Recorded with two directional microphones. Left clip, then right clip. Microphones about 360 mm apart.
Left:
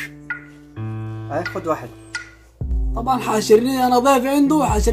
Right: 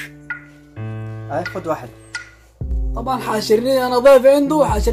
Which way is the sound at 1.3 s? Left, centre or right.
Centre.